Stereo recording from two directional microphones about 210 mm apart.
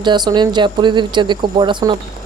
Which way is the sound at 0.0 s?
20° right (ahead or behind).